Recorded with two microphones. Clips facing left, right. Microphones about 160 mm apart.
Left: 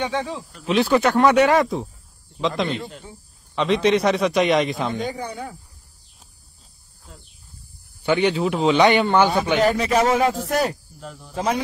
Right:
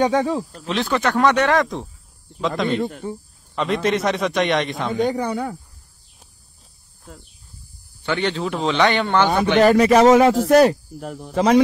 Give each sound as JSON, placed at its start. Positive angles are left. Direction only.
{"t": 0.0, "sound": "speech", "side_deg": -45}
{"t": 0.7, "sound": "a man's voice", "side_deg": 10}
{"t": 2.7, "sound": "speech", "side_deg": -55}
{"t": 3.5, "sound": "a man's voice", "side_deg": 0}
{"t": 5.1, "sound": "speech", "side_deg": -70}
{"t": 8.0, "sound": "speech", "side_deg": 10}
{"t": 9.6, "sound": "speech", "side_deg": -75}